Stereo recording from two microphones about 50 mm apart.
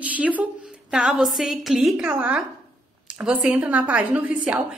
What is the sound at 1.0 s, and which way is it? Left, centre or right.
Speech, centre.